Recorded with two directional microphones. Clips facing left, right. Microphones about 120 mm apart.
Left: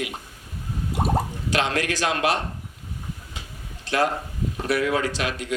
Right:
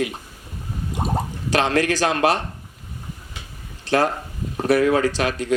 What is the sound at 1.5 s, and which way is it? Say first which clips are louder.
Speech: right 6 dB; 35° right (ahead or behind).